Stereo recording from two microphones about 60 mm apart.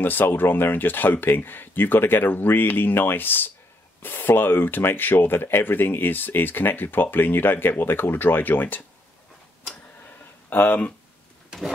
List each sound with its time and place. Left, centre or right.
0.0 s speech: left
10.5 s speech: left